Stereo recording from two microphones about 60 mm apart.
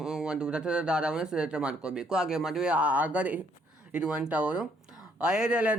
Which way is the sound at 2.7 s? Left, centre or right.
Right.